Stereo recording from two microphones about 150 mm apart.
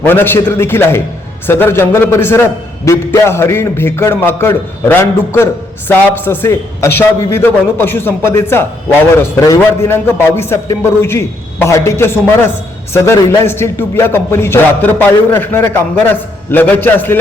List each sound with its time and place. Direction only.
0.0 s a man's voice: 15° left (ahead or behind)